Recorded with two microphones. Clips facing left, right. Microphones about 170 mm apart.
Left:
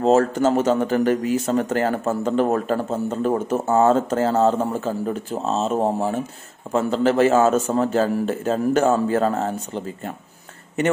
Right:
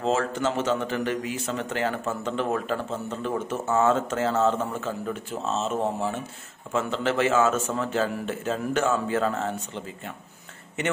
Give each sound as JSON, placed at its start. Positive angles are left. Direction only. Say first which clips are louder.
{"t": 0.0, "sound": "a man's voice", "louder": "left 8 dB", "side_deg": 40}